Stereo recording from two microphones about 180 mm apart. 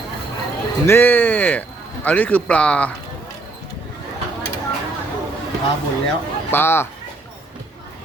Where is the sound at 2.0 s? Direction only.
10° left (ahead or behind).